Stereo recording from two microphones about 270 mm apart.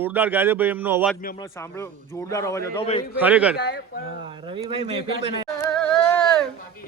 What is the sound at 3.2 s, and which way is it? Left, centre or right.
Speech, centre.